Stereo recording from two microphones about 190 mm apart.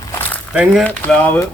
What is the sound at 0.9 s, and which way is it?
Speech, 10° left (ahead or behind).